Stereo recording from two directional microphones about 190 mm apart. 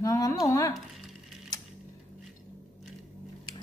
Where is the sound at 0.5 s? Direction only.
15° left (ahead or behind).